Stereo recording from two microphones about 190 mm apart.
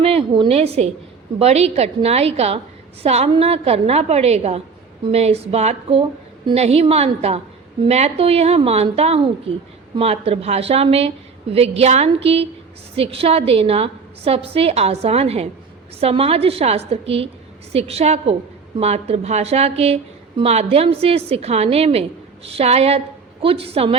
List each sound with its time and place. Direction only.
0.0 s a woman's voice: 30° right (ahead or behind)